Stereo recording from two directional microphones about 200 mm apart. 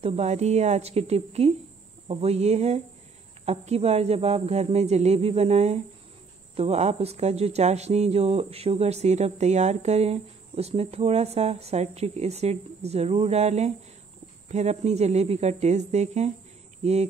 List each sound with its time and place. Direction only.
0.0 s speech: 30° right (ahead or behind)